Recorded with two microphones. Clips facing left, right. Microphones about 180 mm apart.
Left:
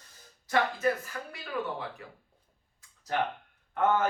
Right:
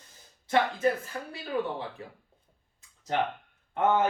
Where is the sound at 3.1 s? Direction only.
20° right (ahead or behind).